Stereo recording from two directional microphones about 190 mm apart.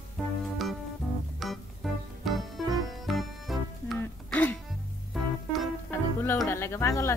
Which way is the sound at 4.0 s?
10° left (ahead or behind).